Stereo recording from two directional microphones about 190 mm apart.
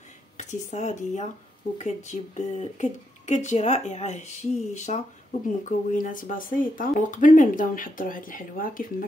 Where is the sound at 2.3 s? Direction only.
40° left (ahead or behind).